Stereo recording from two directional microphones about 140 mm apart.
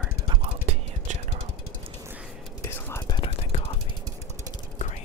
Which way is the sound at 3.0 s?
30° left (ahead or behind).